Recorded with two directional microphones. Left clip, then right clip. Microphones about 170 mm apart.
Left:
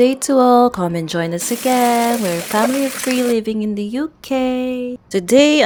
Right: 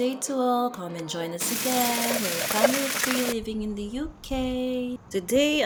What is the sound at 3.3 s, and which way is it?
Speech, 50° left (ahead or behind).